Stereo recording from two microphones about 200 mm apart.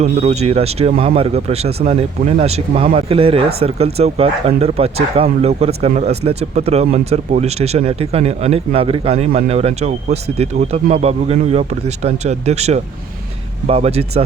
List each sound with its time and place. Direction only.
0.0 s speech: 30° right (ahead or behind)